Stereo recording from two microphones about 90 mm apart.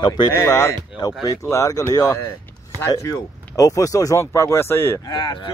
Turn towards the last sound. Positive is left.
turn(degrees=55)  # may be behind; listen again after turning